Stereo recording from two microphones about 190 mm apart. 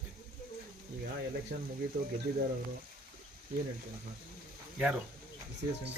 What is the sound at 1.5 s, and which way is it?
Speech, 55° right (ahead or behind).